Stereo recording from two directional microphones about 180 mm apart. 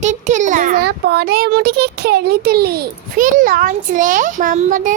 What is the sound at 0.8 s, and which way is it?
A child's voice, 65° right (ahead or behind).